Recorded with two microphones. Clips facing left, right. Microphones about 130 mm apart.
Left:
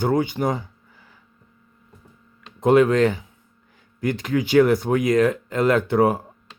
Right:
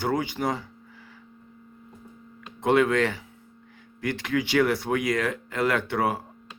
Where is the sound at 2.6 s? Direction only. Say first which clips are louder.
Left 6 dB; 25° left (ahead or behind).